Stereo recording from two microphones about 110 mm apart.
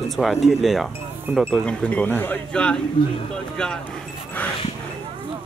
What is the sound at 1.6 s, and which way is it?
Speech, 10° left (ahead or behind).